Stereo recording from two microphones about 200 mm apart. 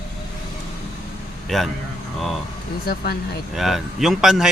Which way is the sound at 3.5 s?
Centre (ahead or behind).